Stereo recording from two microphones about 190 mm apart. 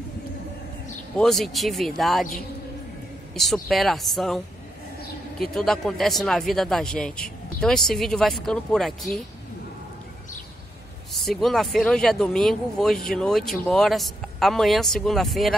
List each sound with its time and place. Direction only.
1.1 s speech: centre (ahead or behind)
3.3 s speech: centre (ahead or behind)
5.4 s speech: centre (ahead or behind)
11.1 s speech: centre (ahead or behind)